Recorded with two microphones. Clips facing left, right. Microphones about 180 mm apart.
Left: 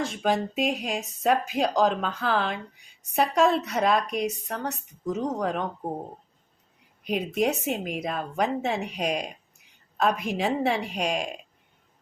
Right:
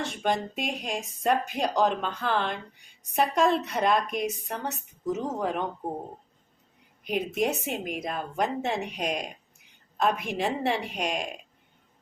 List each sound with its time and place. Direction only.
0.0 s a woman's voice: centre (ahead or behind)
7.0 s a woman's voice: centre (ahead or behind)